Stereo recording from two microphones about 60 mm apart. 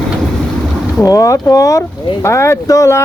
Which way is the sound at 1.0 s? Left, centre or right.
Left.